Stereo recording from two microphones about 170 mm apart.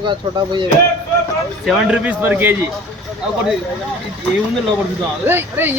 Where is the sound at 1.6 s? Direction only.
5° right (ahead or behind).